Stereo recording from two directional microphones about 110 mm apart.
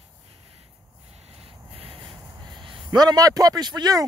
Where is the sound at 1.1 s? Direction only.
65° right (ahead or behind).